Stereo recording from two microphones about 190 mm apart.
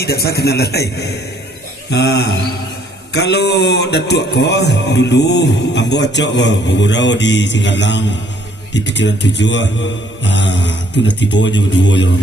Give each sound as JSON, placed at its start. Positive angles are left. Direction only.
{"t": 0.0, "sound": "music", "side_deg": 55}
{"t": 8.7, "sound": "speech", "side_deg": 70}
{"t": 10.2, "sound": "music", "side_deg": 65}